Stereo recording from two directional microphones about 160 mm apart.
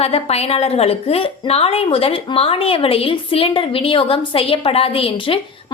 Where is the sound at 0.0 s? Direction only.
40° left (ahead or behind).